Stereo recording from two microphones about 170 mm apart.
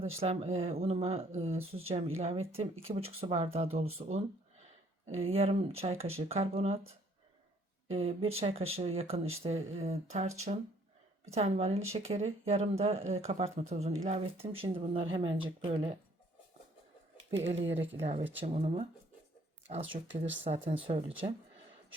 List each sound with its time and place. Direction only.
0.0 s speech: 35° right (ahead or behind)
7.9 s speech: 35° right (ahead or behind)
17.3 s speech: 35° right (ahead or behind)